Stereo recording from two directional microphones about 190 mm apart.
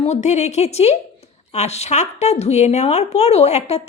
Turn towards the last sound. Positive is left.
turn(degrees=35)  # may be behind; listen again after turning